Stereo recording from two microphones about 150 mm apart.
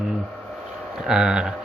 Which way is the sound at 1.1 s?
5° right (ahead or behind).